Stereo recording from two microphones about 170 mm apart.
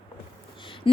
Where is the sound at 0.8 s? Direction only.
30° left (ahead or behind).